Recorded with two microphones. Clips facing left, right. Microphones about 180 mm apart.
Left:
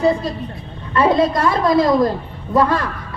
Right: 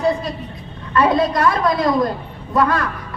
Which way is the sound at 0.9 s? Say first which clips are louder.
Left 1 dB; 25° left (ahead or behind).